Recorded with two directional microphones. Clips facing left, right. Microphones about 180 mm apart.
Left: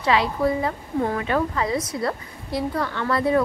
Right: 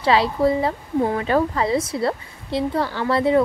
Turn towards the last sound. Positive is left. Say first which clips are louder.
# right 3 dB
turn(degrees=-25)  # may be behind; listen again after turning